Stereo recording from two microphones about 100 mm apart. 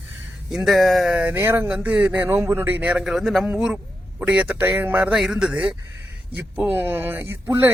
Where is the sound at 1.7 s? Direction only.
15° right (ahead or behind).